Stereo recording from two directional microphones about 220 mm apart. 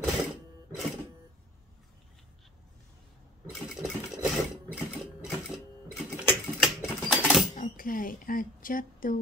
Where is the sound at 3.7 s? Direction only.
Centre (ahead or behind).